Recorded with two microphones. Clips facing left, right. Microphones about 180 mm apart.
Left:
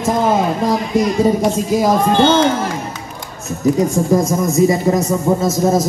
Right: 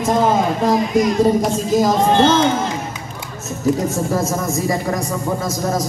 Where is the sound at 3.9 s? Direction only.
15° left (ahead or behind).